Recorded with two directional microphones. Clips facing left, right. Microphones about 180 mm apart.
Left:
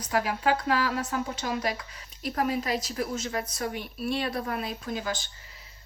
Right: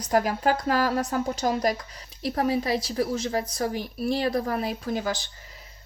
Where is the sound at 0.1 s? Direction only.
45° right (ahead or behind).